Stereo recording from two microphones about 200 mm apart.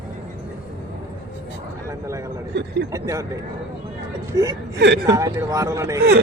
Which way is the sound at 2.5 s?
60° right (ahead or behind).